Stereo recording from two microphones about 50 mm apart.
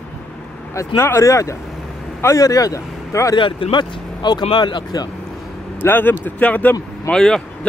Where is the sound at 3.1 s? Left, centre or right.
Left.